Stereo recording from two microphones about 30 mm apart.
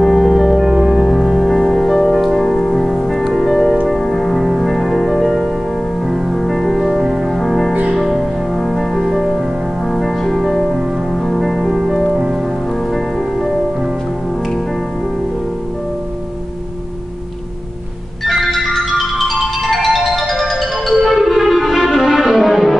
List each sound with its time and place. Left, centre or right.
0.0 s music: centre
6.3 s music: centre
9.8 s music: centre
12.1 s music: centre
12.9 s music: centre
18.2 s music: centre
18.9 s marimba: centre
20.9 s music: centre